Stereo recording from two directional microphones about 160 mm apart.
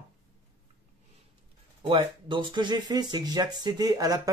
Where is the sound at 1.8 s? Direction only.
30° right (ahead or behind).